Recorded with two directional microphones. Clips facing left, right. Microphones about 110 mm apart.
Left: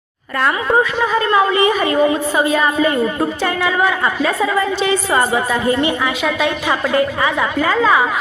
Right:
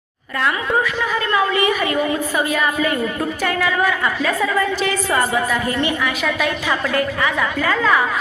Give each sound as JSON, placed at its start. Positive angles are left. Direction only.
{"t": 0.3, "sound": "a woman's voice", "side_deg": 40}